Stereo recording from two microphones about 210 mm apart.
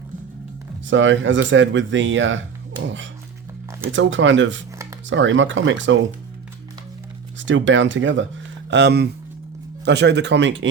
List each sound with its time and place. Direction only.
0.9 s speech: 65° right (ahead or behind)
7.3 s speech: 60° right (ahead or behind)